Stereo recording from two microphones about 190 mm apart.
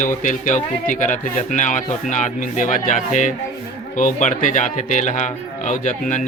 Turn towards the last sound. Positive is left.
turn(degrees=40)  # may be behind; listen again after turning